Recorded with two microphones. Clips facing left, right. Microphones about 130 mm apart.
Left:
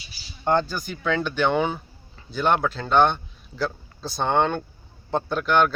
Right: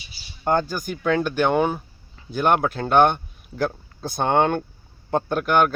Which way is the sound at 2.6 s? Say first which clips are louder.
Right 2 dB; 55° right (ahead or behind).